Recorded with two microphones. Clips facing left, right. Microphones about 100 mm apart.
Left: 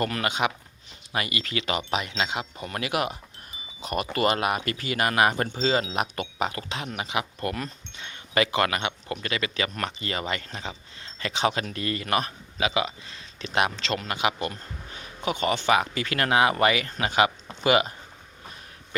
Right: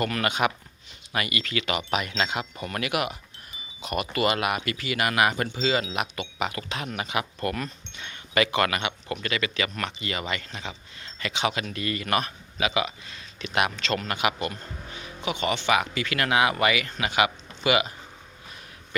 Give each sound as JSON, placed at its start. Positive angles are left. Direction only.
{"t": 0.0, "sound": "speech", "side_deg": 25}
{"t": 14.9, "sound": "speech", "side_deg": 40}